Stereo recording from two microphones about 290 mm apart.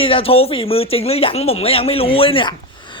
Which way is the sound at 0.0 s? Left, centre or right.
Centre.